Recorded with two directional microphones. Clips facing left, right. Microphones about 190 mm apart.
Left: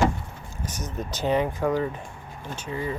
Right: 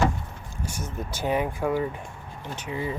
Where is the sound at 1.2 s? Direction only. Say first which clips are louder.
Left 2 dB; 10° right (ahead or behind).